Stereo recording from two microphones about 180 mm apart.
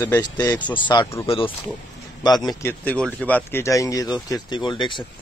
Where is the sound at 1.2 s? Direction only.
30° left (ahead or behind).